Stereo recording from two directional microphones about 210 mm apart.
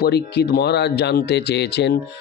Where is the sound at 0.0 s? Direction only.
50° left (ahead or behind).